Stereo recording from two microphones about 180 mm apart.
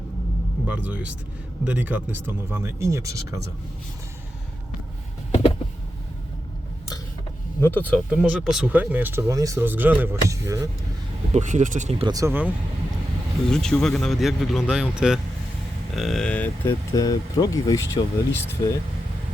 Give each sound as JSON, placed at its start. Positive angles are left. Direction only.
{"t": 0.7, "sound": "speech", "side_deg": -5}
{"t": 5.3, "sound": "a sound", "side_deg": 35}
{"t": 7.6, "sound": "speech", "side_deg": 10}
{"t": 8.2, "sound": "speech", "side_deg": -5}
{"t": 11.3, "sound": "speech", "side_deg": -40}
{"t": 12.0, "sound": "speech", "side_deg": -15}
{"t": 13.5, "sound": "speech", "side_deg": 5}
{"t": 16.9, "sound": "speech", "side_deg": 20}